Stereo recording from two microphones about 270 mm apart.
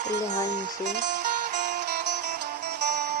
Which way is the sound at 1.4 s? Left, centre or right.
Right.